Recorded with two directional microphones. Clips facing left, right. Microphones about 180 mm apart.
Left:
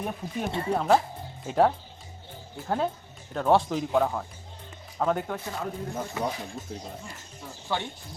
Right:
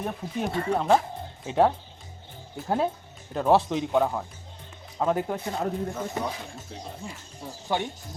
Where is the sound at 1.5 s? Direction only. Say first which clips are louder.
Right 1 dB; centre (ahead or behind).